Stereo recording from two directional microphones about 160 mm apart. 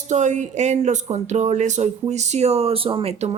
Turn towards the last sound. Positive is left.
turn(degrees=-40)  # may be behind; listen again after turning